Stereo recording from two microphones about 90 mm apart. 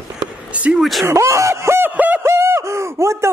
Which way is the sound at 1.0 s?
35° right (ahead or behind).